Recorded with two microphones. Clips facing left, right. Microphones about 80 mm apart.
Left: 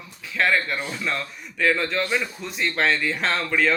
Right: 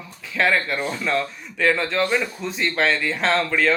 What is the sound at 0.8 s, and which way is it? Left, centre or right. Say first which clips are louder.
Speech: right 4 dB; centre.